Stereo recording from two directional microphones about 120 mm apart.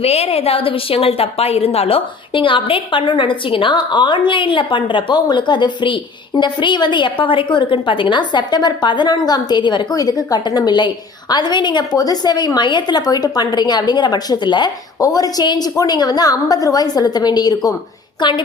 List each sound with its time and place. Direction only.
0.0 s a woman's voice: 60° left (ahead or behind); by 18.4 s 40° left (ahead or behind)